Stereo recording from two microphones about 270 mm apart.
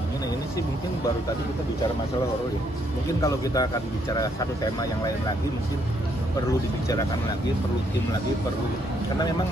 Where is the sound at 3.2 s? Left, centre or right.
Centre.